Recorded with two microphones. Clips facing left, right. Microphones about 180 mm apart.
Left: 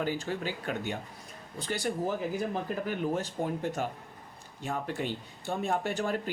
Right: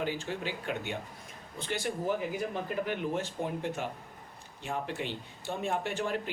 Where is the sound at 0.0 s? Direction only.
45° left (ahead or behind).